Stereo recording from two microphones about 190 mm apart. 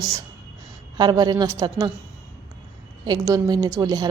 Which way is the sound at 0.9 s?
20° right (ahead or behind).